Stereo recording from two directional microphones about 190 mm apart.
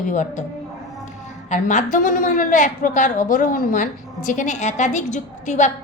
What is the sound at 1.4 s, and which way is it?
A woman's voice, 40° left (ahead or behind).